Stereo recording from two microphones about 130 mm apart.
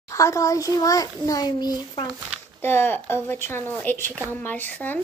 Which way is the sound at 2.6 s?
15° left (ahead or behind).